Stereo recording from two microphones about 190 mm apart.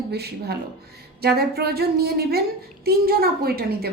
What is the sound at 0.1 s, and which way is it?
Speech, 60° right (ahead or behind).